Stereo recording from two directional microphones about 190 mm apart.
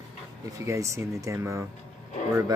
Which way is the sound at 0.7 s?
15° right (ahead or behind).